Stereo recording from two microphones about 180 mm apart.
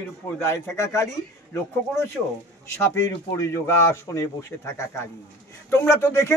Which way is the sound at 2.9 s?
15° left (ahead or behind).